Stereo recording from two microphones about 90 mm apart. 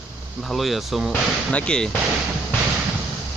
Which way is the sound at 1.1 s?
15° left (ahead or behind).